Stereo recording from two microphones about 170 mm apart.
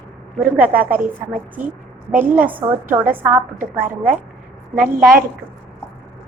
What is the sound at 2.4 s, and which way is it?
A woman's voice, 10° right (ahead or behind).